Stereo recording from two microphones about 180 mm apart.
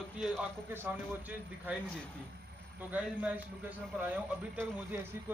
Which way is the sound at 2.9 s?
5° right (ahead or behind).